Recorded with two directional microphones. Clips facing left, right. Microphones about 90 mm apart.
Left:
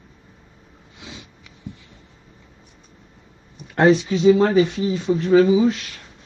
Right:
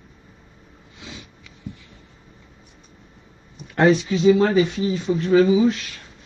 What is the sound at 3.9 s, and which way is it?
Speech, 25° left (ahead or behind).